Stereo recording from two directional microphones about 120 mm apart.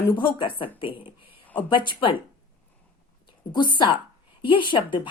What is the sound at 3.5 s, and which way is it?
A woman's voice, 40° left (ahead or behind).